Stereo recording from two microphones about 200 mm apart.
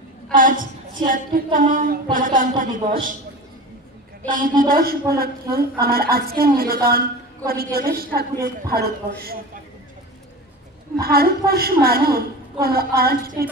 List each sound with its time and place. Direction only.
0.3 s a woman's voice: 40° right (ahead or behind)
4.2 s a woman's voice: 10° left (ahead or behind)
4.6 s a woman's voice: 45° right (ahead or behind)
11.0 s a woman's voice: 50° right (ahead or behind)